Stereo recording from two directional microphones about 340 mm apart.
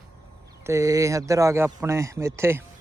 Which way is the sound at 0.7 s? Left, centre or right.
Centre.